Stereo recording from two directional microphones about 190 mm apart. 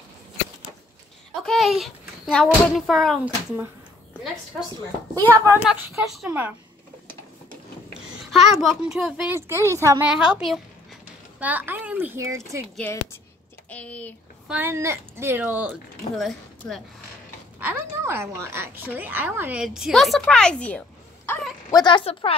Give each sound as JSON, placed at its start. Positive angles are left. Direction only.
{"t": 1.4, "sound": "a woman's voice", "side_deg": 0}
{"t": 5.1, "sound": "a woman's voice", "side_deg": -15}
{"t": 5.7, "sound": "a woman's voice", "side_deg": 0}
{"t": 8.3, "sound": "a woman's voice", "side_deg": 0}
{"t": 12.7, "sound": "speech", "side_deg": 10}
{"t": 14.5, "sound": "a woman's voice", "side_deg": -10}
{"t": 17.6, "sound": "a woman's voice", "side_deg": -10}
{"t": 21.6, "sound": "a woman's voice", "side_deg": 20}